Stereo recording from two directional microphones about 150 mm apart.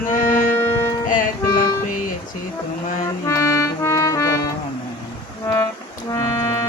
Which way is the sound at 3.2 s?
20° left (ahead or behind).